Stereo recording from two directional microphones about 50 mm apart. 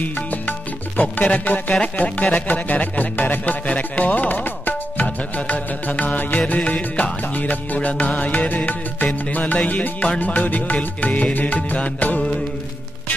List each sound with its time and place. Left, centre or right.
0.0 s music: left